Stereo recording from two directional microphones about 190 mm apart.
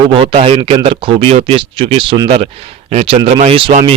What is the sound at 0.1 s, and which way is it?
A man's voice, 30° right (ahead or behind).